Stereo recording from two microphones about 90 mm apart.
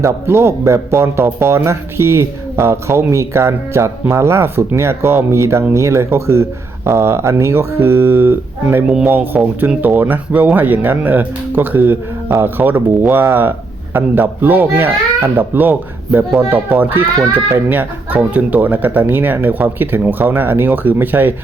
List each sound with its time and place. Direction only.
0.0 s speech: 30° right (ahead or behind)